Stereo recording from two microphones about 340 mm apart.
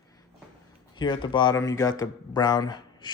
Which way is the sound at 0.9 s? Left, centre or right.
Centre.